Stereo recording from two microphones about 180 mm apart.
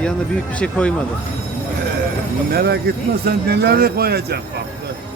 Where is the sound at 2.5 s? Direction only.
65° right (ahead or behind).